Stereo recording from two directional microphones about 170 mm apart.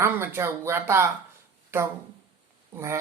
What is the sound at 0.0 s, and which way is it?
Speech, 15° right (ahead or behind).